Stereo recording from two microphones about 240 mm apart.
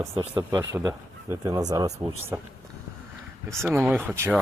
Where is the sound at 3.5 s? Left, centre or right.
Centre.